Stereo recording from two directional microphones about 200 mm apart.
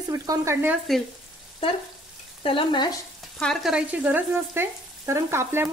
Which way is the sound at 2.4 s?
25° left (ahead or behind).